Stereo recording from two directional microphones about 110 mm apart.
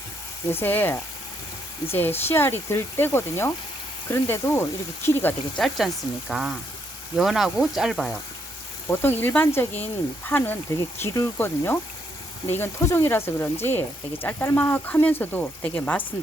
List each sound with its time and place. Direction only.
0.5 s speech: 20° left (ahead or behind)
5.5 s speech: centre (ahead or behind)
8.9 s speech: 20° left (ahead or behind)